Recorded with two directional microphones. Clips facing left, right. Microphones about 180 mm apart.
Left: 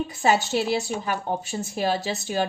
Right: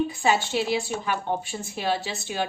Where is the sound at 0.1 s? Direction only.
40° left (ahead or behind).